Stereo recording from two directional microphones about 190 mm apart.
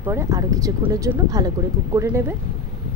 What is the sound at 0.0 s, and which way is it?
Speech, 15° right (ahead or behind).